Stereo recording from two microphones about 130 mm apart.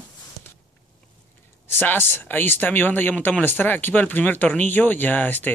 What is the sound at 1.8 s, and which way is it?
Speech, 15° left (ahead or behind).